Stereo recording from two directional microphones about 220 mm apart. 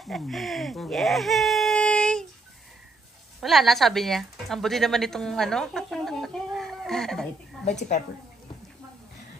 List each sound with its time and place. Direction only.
0.0 s speech: centre (ahead or behind)
3.3 s speech: centre (ahead or behind)